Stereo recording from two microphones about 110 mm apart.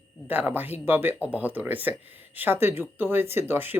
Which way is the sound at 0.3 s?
15° right (ahead or behind).